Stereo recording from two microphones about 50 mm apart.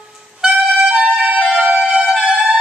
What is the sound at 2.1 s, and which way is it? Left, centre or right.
Music, centre.